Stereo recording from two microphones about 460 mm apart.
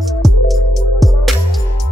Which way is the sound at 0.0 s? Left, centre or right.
Centre.